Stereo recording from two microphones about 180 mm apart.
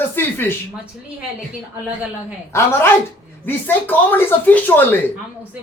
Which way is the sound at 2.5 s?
15° left (ahead or behind).